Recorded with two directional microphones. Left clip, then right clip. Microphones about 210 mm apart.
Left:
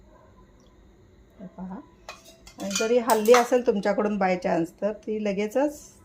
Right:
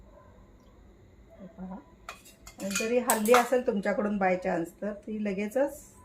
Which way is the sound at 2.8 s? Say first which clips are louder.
Left 7 dB; 45° left (ahead or behind).